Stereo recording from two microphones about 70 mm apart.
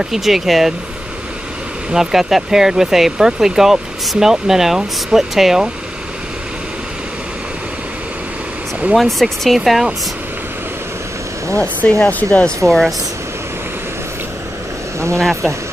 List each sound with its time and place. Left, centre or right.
0.0 s speech: centre
1.9 s speech: centre
8.9 s speech: centre
11.5 s speech: centre
12.6 s speech: centre
15.1 s speech: centre